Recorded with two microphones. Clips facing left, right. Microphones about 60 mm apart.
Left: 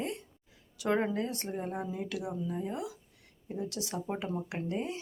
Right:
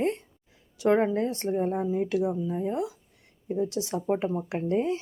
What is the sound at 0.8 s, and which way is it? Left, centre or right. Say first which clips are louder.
Speech: right 7 dB; right.